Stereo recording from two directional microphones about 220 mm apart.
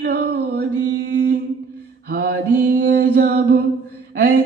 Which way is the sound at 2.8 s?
45° right (ahead or behind).